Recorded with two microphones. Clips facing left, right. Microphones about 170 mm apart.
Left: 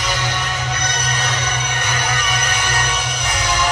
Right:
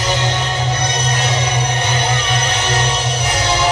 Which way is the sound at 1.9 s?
30° right (ahead or behind).